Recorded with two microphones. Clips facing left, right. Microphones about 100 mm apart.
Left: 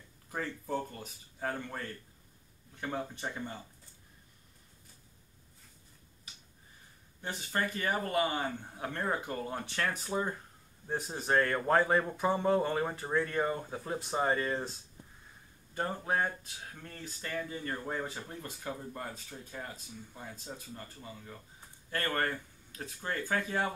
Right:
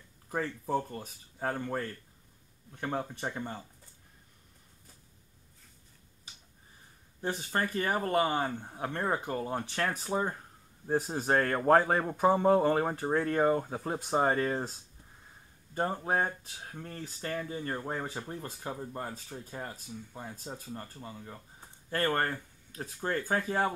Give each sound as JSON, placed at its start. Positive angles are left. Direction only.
{"t": 0.3, "sound": "speech", "side_deg": -35}
{"t": 7.2, "sound": "speech", "side_deg": -40}
{"t": 15.7, "sound": "speech", "side_deg": -30}